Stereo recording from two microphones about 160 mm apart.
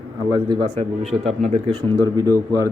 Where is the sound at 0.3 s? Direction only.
25° right (ahead or behind).